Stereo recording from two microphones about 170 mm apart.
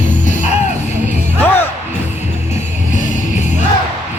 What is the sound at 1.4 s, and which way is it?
Music, 10° left (ahead or behind).